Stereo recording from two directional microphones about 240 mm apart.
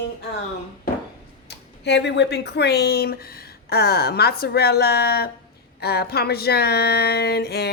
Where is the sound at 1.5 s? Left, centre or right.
Left.